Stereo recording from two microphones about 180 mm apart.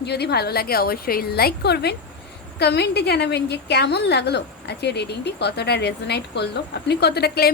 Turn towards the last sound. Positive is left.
turn(degrees=60)  # may be behind; listen again after turning